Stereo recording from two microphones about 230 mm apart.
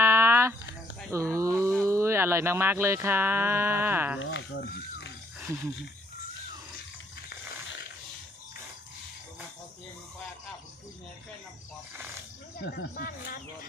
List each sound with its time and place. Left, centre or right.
0.0 s a sound: centre
1.8 s speech: centre
4.2 s speech: left
12.6 s speech: left